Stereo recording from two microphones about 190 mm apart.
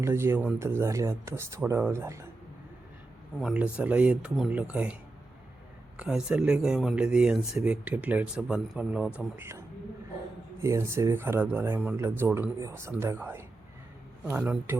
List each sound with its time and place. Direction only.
0.0 s speech: 15° right (ahead or behind)
3.4 s speech: 5° right (ahead or behind)
6.0 s speech: 5° right (ahead or behind)